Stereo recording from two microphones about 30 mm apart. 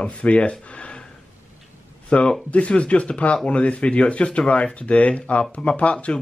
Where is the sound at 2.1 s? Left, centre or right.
Left.